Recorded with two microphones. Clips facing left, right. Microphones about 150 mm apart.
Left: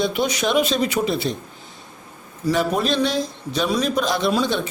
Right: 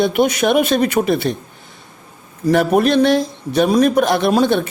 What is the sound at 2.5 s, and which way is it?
A man's voice, 60° right (ahead or behind).